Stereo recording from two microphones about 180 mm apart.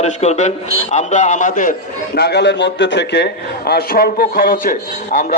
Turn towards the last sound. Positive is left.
turn(degrees=50)  # may be behind; listen again after turning